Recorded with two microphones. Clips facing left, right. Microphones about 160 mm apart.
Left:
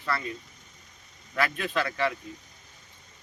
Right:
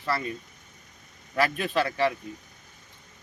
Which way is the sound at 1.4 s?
35° right (ahead or behind).